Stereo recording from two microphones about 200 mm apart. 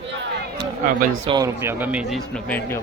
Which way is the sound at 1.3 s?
20° right (ahead or behind).